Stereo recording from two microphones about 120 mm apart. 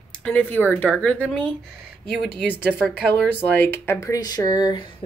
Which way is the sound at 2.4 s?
5° right (ahead or behind).